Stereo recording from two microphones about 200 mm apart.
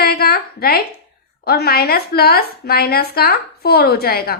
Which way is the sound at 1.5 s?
50° left (ahead or behind).